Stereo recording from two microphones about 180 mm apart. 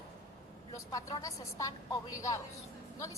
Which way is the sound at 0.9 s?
20° left (ahead or behind).